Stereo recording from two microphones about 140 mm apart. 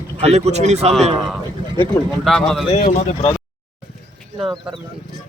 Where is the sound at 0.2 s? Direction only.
50° right (ahead or behind).